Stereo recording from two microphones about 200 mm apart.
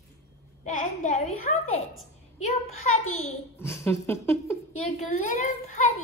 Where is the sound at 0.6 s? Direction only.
35° left (ahead or behind).